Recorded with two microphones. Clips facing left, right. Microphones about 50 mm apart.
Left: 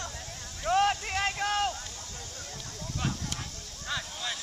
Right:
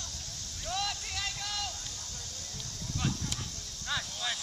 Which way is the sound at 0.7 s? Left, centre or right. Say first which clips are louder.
Left 11 dB; left.